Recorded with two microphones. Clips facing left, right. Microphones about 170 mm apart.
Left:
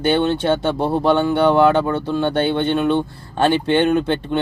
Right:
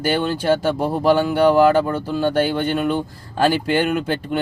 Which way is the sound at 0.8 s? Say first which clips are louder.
Left 2 dB; 30° left (ahead or behind).